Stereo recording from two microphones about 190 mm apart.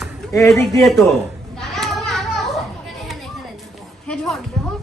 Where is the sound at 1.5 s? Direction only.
Centre (ahead or behind).